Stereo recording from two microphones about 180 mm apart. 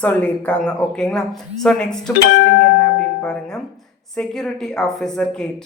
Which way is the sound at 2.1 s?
70° left (ahead or behind).